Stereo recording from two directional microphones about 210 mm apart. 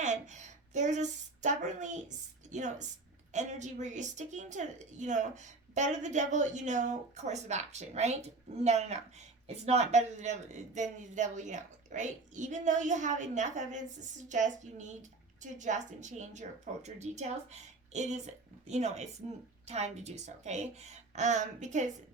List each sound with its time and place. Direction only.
0.0 s a woman's voice: 35° right (ahead or behind)